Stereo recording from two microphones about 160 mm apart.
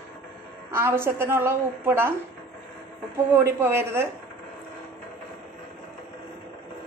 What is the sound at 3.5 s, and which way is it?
Speech, 15° right (ahead or behind).